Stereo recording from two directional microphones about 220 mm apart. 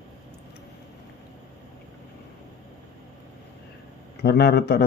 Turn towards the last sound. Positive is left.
turn(degrees=45)  # may be behind; listen again after turning